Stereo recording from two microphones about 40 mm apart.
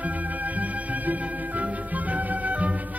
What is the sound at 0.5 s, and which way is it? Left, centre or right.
Music, right.